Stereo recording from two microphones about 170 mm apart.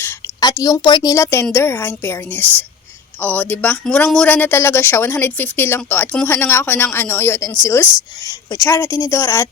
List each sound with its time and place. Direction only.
0.3 s a woman's voice: 20° left (ahead or behind)